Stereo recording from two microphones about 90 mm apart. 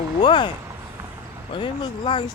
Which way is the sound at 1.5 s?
65° left (ahead or behind).